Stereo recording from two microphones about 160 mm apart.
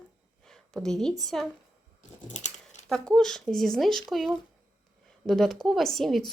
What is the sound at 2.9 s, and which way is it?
A woman's voice, 5° left (ahead or behind).